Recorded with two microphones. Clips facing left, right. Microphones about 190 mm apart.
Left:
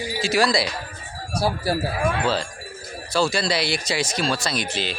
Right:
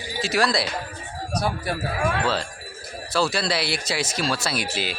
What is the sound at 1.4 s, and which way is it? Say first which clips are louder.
Speech: left 4 dB; 30° left (ahead or behind).